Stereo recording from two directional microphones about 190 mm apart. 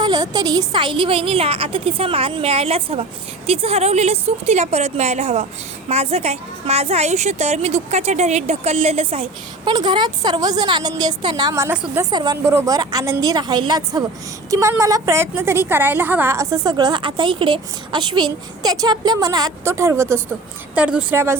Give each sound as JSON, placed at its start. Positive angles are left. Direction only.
{"t": 0.0, "sound": "a woman's voice", "side_deg": -20}